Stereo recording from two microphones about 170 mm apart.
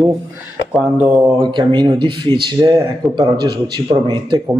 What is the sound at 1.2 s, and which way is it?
Speech, 25° right (ahead or behind).